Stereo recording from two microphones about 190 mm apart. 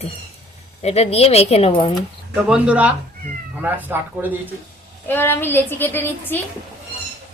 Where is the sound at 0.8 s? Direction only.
35° left (ahead or behind).